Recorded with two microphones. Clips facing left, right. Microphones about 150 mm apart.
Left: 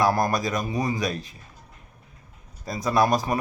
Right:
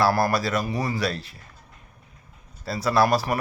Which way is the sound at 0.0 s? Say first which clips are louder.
Right 1 dB; 20° left (ahead or behind).